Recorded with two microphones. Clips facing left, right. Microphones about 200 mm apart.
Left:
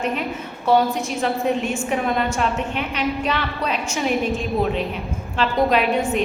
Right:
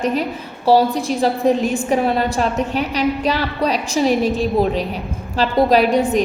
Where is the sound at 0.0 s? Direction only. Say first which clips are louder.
Right 4 dB; 35° right (ahead or behind).